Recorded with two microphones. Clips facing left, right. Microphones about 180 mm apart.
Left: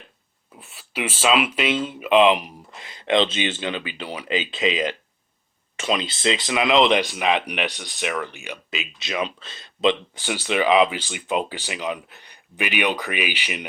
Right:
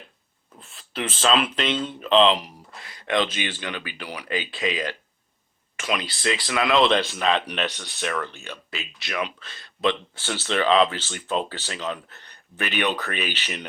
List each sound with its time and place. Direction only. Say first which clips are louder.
0.6 s speech: left 2 dB; 10° left (ahead or behind)